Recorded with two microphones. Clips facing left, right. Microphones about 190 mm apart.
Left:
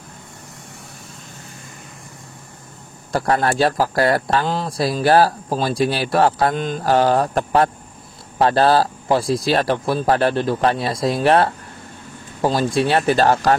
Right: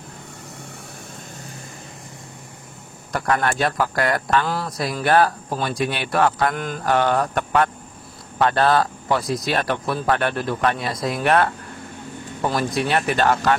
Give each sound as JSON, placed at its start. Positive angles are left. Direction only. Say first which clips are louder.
{"t": 3.1, "sound": "a man's voice", "louder": "left 3 dB", "side_deg": 30}